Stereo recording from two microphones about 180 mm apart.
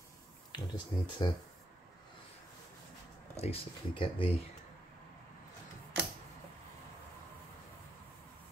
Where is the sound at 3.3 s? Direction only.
35° left (ahead or behind).